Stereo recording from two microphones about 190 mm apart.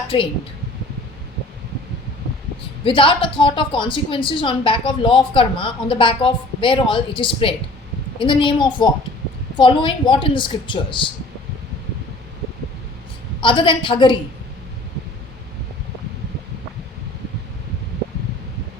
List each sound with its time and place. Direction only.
0.1 s speech: 30° left (ahead or behind)
2.8 s speech: 25° left (ahead or behind)
13.4 s speech: 25° left (ahead or behind)